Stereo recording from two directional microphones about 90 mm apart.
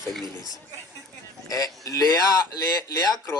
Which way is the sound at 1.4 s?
40° left (ahead or behind).